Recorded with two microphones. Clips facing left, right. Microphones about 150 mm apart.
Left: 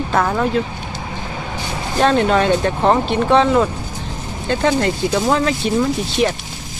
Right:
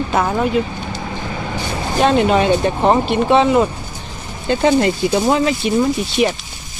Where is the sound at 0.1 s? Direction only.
10° right (ahead or behind).